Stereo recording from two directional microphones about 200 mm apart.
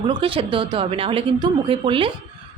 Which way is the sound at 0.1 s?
25° right (ahead or behind).